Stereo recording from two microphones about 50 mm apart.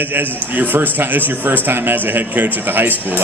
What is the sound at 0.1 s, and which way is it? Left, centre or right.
A man's voice, right.